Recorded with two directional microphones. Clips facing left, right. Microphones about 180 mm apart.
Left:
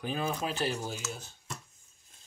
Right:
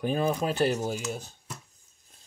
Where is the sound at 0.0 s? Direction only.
50° right (ahead or behind).